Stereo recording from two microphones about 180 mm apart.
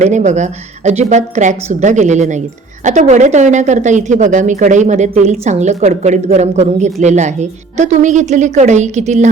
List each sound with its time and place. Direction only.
0.0 s a woman's voice: 40° right (ahead or behind)